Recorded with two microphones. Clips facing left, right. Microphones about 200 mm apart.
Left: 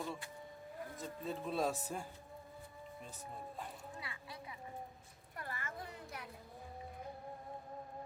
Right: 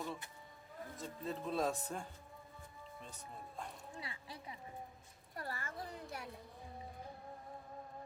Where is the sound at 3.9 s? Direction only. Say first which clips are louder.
Even; 30° right (ahead or behind).